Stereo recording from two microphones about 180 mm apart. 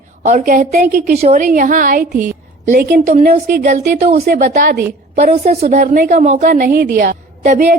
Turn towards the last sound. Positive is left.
turn(degrees=-45)  # may be behind; listen again after turning